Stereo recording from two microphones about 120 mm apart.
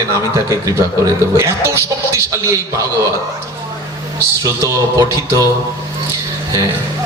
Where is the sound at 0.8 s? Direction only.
25° right (ahead or behind).